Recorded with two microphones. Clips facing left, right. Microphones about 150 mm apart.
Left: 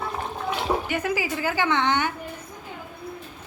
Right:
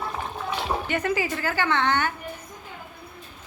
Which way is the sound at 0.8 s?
10° left (ahead or behind).